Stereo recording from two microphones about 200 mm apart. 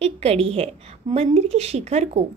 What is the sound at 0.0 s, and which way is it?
A woman's voice, 30° right (ahead or behind).